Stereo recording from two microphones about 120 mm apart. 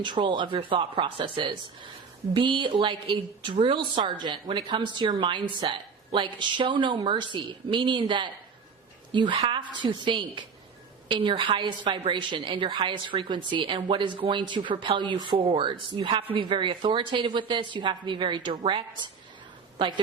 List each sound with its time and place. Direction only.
0.0 s speech: 40° right (ahead or behind)